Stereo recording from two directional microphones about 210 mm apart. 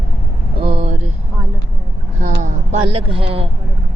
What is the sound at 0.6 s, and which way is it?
Vehicle, 25° right (ahead or behind).